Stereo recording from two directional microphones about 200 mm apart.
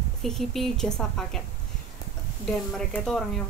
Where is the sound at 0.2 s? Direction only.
Centre (ahead or behind).